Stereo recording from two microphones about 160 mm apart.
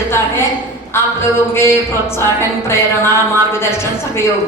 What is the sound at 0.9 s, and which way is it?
A woman's voice, 15° left (ahead or behind).